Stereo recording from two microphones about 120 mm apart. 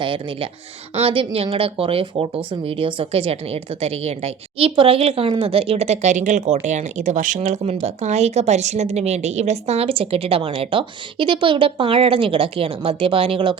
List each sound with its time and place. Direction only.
0.0 s a woman's voice: 45° right (ahead or behind); by 7.3 s 90° right
7.4 s a woman's voice: 75° right (ahead or behind); by 13.6 s 45° right (ahead or behind)